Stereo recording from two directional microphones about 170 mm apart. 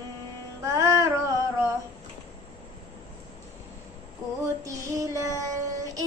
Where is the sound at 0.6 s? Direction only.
15° right (ahead or behind).